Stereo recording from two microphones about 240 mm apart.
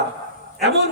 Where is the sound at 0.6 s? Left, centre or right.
Right.